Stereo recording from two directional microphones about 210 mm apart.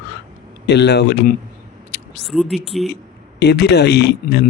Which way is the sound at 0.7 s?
50° left (ahead or behind).